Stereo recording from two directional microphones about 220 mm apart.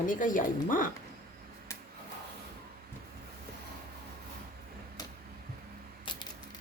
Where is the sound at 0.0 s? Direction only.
35° left (ahead or behind).